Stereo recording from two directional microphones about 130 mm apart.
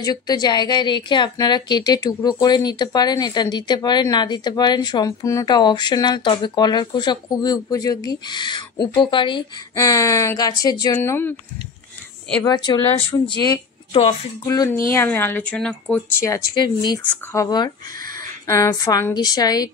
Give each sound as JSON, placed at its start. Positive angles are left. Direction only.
{"t": 0.0, "sound": "speech", "side_deg": 30}
{"t": 9.8, "sound": "speech", "side_deg": 25}
{"t": 11.0, "sound": "speech", "side_deg": 15}
{"t": 12.4, "sound": "speech", "side_deg": 35}
{"t": 14.4, "sound": "speech", "side_deg": 20}
{"t": 16.5, "sound": "speech", "side_deg": 35}